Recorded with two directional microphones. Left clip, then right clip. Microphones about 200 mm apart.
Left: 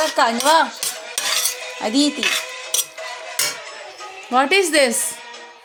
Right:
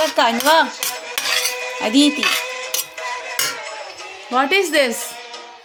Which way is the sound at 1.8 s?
10° right (ahead or behind).